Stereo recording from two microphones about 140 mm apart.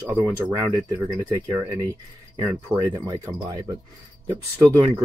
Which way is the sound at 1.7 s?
25° right (ahead or behind).